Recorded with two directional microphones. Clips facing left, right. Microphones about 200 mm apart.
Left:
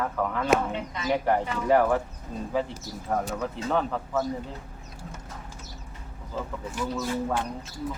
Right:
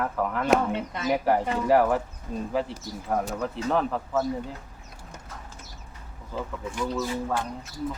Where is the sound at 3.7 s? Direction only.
Centre (ahead or behind).